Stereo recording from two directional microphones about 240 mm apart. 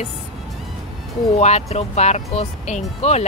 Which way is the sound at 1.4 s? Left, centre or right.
Left.